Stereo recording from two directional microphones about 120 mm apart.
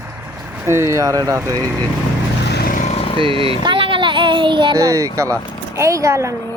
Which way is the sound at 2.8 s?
60° left (ahead or behind).